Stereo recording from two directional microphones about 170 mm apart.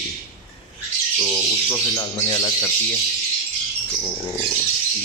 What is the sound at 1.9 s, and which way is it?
Speech, 20° left (ahead or behind).